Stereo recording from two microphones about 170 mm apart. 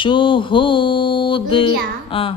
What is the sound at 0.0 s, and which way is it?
Music, 30° left (ahead or behind).